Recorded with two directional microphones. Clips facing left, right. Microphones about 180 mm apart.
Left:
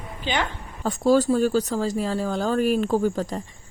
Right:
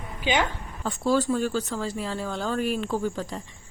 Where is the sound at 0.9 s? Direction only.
40° left (ahead or behind).